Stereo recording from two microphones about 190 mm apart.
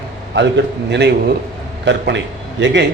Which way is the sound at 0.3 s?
65° right (ahead or behind).